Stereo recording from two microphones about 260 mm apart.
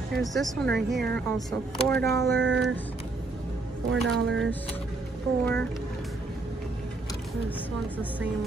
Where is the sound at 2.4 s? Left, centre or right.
Right.